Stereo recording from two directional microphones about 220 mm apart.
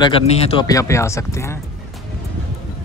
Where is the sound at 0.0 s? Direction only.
25° left (ahead or behind).